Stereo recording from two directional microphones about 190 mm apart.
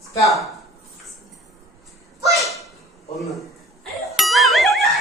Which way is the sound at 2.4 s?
Centre (ahead or behind).